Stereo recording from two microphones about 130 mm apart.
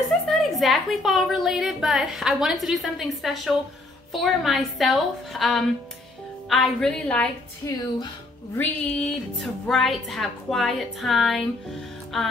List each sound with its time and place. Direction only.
0.3 s a woman's voice: centre (ahead or behind)
7.6 s speech: 30° left (ahead or behind)
8.5 s speech: 15° left (ahead or behind)
9.4 s a woman's voice: centre (ahead or behind)